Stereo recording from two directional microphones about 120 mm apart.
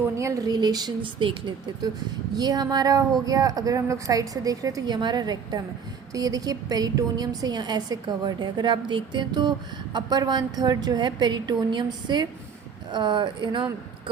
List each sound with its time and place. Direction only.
0.2 s a woman's voice: 25° right (ahead or behind); by 13.7 s 40° right (ahead or behind)